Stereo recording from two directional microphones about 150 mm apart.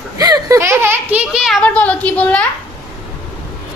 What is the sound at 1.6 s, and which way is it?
Speech, 10° left (ahead or behind).